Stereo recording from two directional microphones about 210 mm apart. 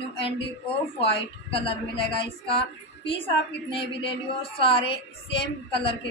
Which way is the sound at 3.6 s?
25° left (ahead or behind).